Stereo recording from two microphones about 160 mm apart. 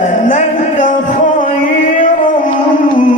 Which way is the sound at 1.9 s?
55° left (ahead or behind).